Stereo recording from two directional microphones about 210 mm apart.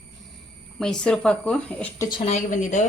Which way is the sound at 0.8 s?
5° left (ahead or behind).